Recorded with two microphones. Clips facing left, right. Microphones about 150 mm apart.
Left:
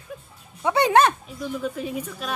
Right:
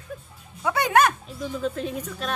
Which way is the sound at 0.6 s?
30° left (ahead or behind).